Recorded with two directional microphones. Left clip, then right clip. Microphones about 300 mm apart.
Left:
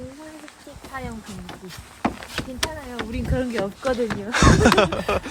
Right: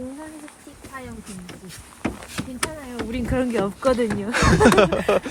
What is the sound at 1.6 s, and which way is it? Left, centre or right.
Speech, centre.